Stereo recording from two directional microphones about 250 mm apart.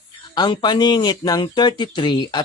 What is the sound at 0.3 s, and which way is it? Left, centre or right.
A man's voice, centre.